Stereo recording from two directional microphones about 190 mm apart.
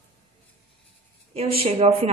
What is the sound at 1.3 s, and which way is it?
Speech, 30° right (ahead or behind).